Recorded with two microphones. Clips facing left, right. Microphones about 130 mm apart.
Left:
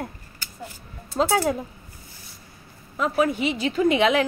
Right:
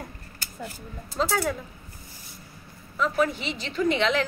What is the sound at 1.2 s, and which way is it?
Speech, 40° left (ahead or behind).